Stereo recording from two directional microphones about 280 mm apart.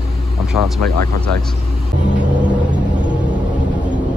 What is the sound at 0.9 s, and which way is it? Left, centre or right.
Speech, right.